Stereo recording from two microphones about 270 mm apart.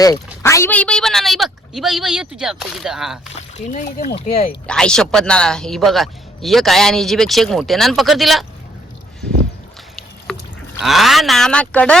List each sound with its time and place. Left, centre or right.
0.4 s speech: centre
3.7 s speech: left
4.6 s speech: centre
10.8 s speech: centre